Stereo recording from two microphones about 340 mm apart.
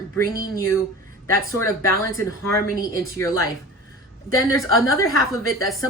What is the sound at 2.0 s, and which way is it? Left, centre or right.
Speech, right.